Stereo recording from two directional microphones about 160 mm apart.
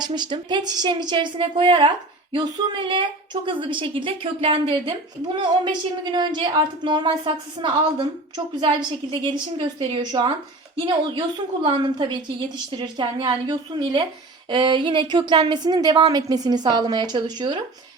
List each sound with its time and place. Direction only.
0.0 s a woman's voice: 30° right (ahead or behind)